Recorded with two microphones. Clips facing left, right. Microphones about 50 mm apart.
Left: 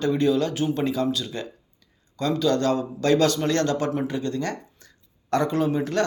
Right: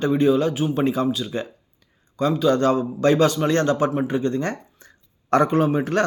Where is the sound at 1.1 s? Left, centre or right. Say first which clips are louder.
Right 3 dB; centre.